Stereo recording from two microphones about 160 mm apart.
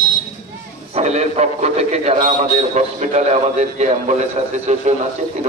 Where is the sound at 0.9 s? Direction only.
45° right (ahead or behind).